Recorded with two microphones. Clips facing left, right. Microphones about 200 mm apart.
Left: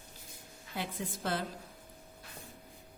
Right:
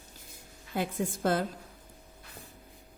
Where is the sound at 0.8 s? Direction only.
45° right (ahead or behind).